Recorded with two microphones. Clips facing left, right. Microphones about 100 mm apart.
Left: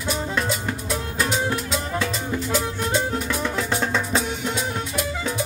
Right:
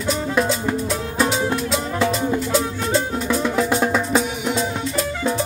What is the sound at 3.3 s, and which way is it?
Music, 10° right (ahead or behind).